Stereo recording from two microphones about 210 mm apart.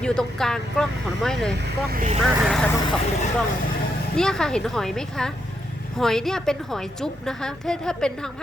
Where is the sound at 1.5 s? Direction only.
50° right (ahead or behind).